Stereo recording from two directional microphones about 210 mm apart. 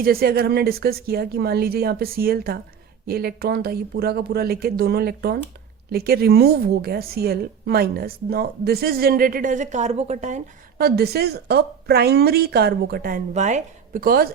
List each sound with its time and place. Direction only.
0.0 s a woman's voice: 45° right (ahead or behind)
10.8 s a woman's voice: 50° right (ahead or behind)